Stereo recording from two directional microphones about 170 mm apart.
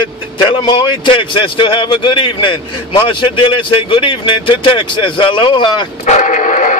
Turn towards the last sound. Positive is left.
turn(degrees=50)  # may be behind; listen again after turning